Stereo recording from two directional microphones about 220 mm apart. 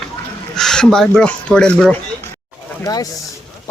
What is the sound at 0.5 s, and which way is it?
Speech, 5° left (ahead or behind).